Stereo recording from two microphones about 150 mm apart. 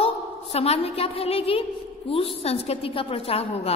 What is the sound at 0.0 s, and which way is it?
A woman's voice, 45° left (ahead or behind).